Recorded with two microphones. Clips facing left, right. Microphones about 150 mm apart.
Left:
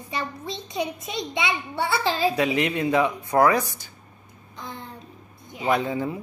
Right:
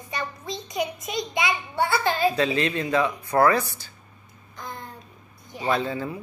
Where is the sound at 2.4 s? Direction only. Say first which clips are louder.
Left 1 dB; 15° left (ahead or behind).